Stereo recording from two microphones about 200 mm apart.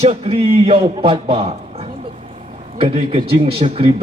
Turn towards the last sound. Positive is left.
turn(degrees=-30)  # may be behind; listen again after turning